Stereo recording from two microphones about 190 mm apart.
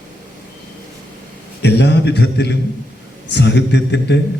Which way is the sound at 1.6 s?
60° left (ahead or behind).